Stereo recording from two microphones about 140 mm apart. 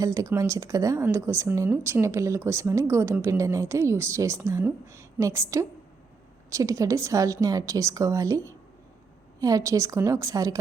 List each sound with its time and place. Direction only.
0.0 s speech: 25° right (ahead or behind)